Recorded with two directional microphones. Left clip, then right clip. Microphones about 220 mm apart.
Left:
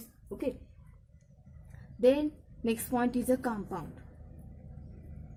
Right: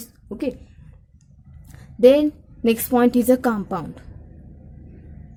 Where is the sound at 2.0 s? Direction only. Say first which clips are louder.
Right 12 dB; 40° right (ahead or behind).